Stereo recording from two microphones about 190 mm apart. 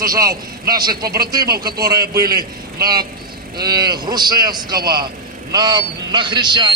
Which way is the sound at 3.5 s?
20° right (ahead or behind).